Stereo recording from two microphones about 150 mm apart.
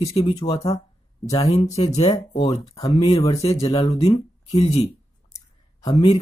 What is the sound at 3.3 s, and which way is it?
Speech, 45° left (ahead or behind).